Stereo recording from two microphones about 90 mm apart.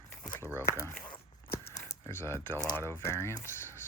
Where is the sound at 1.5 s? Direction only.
35° left (ahead or behind).